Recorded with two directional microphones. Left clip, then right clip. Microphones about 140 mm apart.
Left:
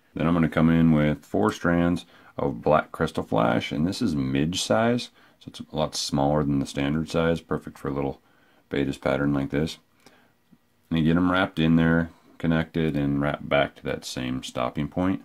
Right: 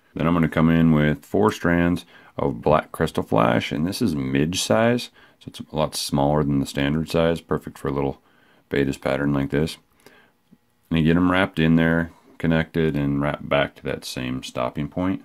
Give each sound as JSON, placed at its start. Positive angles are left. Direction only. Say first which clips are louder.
{"t": 0.1, "sound": "speech", "louder": "right 2 dB", "side_deg": -20}